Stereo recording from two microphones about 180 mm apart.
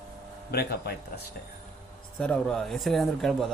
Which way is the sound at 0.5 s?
60° left (ahead or behind).